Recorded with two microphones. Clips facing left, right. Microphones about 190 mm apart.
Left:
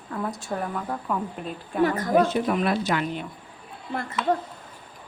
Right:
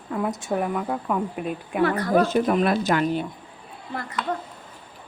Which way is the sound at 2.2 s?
45° right (ahead or behind).